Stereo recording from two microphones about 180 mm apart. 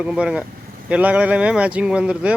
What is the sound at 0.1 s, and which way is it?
Speech, 5° right (ahead or behind).